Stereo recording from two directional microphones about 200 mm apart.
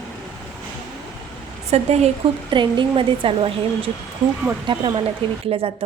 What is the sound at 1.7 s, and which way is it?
A woman's voice, 30° right (ahead or behind).